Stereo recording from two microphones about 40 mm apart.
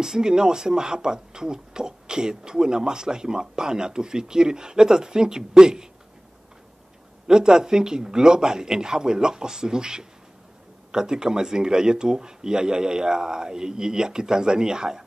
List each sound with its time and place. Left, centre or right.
0.0 s speech: centre
7.2 s speech: centre